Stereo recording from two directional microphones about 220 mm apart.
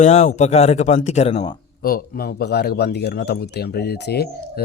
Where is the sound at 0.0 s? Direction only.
30° left (ahead or behind).